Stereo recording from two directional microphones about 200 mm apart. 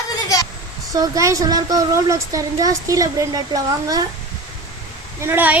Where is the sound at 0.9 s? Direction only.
15° right (ahead or behind).